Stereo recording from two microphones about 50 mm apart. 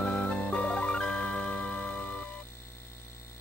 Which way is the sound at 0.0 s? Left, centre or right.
Left.